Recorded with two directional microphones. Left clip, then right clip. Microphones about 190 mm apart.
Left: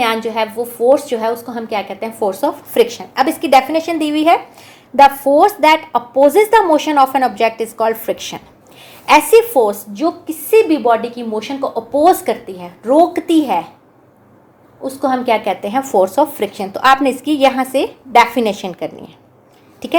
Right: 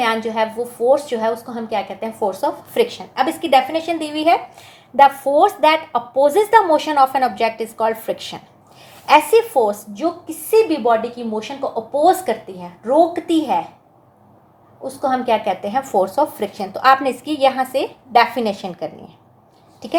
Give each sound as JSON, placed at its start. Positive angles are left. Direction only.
{"t": 0.0, "sound": "a woman's voice", "side_deg": 25}
{"t": 14.8, "sound": "a woman's voice", "side_deg": 25}